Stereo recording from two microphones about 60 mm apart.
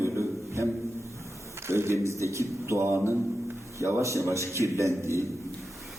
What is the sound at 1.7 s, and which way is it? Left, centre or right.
Speech, right.